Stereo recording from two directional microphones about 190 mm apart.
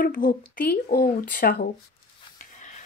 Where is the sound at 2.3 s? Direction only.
40° left (ahead or behind).